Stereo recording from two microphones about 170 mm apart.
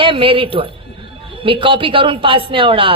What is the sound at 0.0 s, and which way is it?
Speech, 30° right (ahead or behind).